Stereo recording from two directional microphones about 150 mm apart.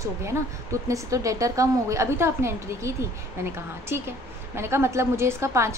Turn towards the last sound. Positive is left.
turn(degrees=-20)  # may be behind; listen again after turning